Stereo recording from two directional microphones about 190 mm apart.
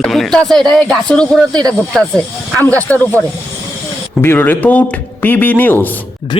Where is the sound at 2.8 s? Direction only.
10° left (ahead or behind).